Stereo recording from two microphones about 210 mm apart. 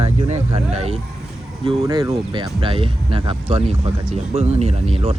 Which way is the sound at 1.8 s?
15° right (ahead or behind).